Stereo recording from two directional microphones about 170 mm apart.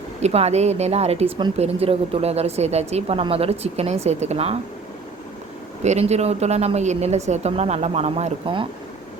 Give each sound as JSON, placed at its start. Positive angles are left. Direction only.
{"t": 0.2, "sound": "a woman's voice", "side_deg": -40}
{"t": 5.8, "sound": "a woman's voice", "side_deg": -40}